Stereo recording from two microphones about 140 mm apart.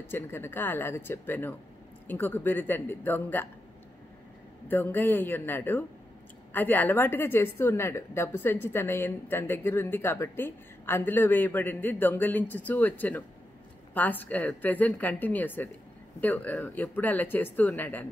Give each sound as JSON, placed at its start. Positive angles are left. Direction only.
{"t": 0.1, "sound": "a woman's voice", "side_deg": 15}
{"t": 4.6, "sound": "a woman's voice", "side_deg": 15}